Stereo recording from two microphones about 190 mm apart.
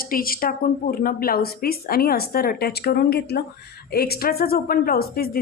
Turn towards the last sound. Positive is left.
turn(degrees=55)  # may be behind; listen again after turning